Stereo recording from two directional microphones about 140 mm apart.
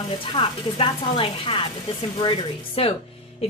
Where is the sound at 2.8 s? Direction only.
45° left (ahead or behind).